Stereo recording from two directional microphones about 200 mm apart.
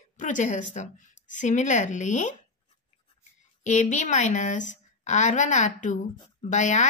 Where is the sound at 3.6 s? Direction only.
40° left (ahead or behind).